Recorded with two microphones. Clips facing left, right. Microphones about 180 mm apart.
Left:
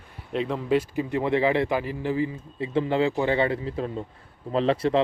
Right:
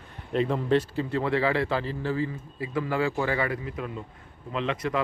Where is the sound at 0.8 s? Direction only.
15° left (ahead or behind).